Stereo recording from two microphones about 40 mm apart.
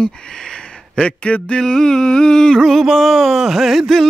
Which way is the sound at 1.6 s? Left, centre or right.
Centre.